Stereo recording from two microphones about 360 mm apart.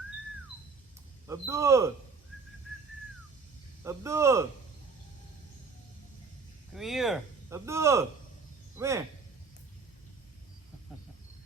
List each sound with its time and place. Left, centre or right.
1.3 s speech: centre
3.8 s speech: centre
6.7 s speech: centre